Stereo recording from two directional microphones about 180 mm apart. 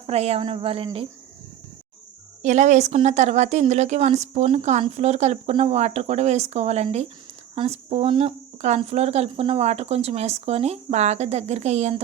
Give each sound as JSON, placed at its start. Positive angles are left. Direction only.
{"t": 0.1, "sound": "a woman's voice", "side_deg": -35}
{"t": 2.4, "sound": "a woman's voice", "side_deg": -40}